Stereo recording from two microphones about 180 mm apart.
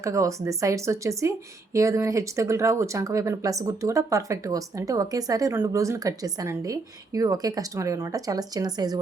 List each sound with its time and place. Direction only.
0.0 s speech: 15° right (ahead or behind)